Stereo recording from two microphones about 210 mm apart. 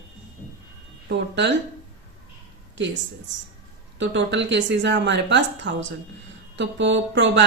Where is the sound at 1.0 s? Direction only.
55° right (ahead or behind).